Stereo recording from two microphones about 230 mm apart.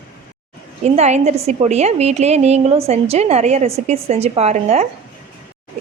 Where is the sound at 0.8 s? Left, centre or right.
Right.